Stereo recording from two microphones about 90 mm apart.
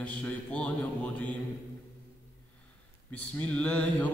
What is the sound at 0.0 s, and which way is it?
Mantra, 15° left (ahead or behind).